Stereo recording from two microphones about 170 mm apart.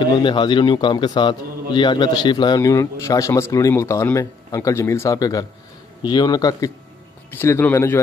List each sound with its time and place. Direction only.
0.0 s a man's voice: 25° left (ahead or behind)